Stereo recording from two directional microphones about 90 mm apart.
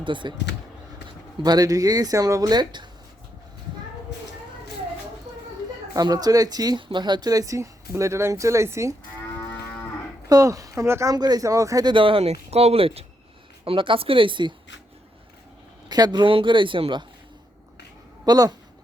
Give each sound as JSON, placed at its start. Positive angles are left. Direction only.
{"t": 0.0, "sound": "speech", "side_deg": -65}
{"t": 1.4, "sound": "speech", "side_deg": -45}
{"t": 5.9, "sound": "speech", "side_deg": -45}
{"t": 6.8, "sound": "speech", "side_deg": -60}
{"t": 10.2, "sound": "speech", "side_deg": -40}
{"t": 11.1, "sound": "speech", "side_deg": -45}
{"t": 11.9, "sound": "speech", "side_deg": -75}
{"t": 13.7, "sound": "speech", "side_deg": -75}
{"t": 15.9, "sound": "speech", "side_deg": -50}
{"t": 16.3, "sound": "speech", "side_deg": -65}
{"t": 18.3, "sound": "speech", "side_deg": -45}